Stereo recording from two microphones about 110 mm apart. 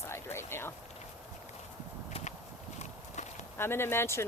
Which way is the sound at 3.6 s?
20° left (ahead or behind).